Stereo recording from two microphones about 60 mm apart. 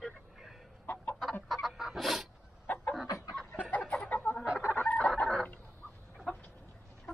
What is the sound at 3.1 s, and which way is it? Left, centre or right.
Chicken, left.